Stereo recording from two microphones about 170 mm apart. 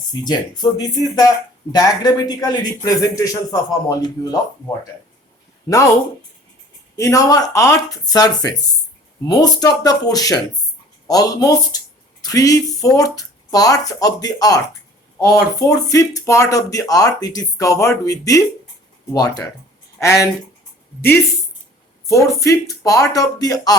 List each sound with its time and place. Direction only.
0.1 s speech: 25° left (ahead or behind)
5.6 s speech: 20° left (ahead or behind)
6.9 s speech: 20° left (ahead or behind)
22.0 s speech: 20° left (ahead or behind)